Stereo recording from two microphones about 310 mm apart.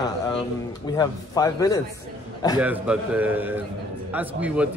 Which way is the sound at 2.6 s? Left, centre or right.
Centre.